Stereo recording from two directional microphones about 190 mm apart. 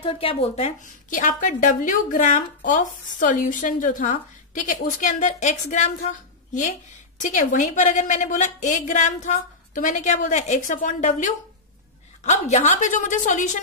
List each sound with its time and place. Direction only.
0.0 s a woman's voice: 30° left (ahead or behind)